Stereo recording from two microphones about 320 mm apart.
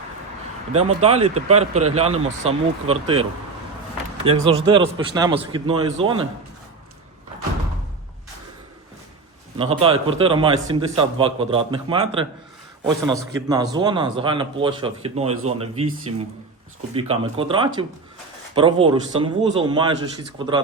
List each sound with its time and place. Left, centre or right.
0.7 s a man's voice: centre
9.6 s a man's voice: centre